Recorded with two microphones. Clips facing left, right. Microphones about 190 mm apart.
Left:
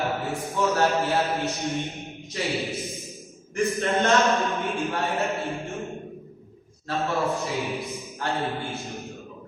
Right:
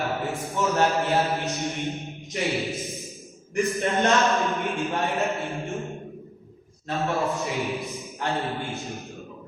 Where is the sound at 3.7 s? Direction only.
15° right (ahead or behind).